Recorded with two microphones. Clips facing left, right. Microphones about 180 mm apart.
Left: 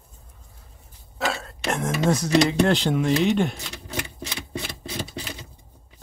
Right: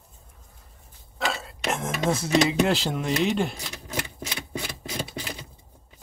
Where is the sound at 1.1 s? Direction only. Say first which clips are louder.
Left 2 dB; centre (ahead or behind).